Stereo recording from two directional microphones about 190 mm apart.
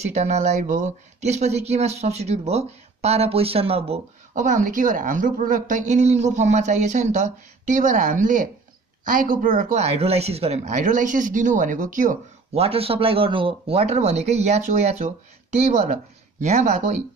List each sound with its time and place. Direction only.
0.0 s speech: 35° right (ahead or behind)
12.6 s speech: 30° right (ahead or behind)